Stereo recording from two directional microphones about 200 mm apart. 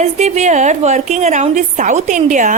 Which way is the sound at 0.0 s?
35° right (ahead or behind).